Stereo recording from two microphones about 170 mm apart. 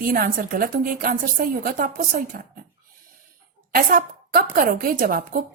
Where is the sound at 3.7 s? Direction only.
55° right (ahead or behind).